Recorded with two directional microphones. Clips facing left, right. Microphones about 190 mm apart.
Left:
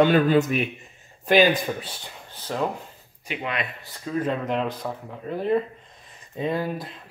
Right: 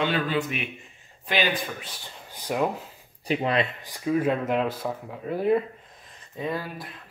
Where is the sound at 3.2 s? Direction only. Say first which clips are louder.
Right 6 dB; 35° right (ahead or behind).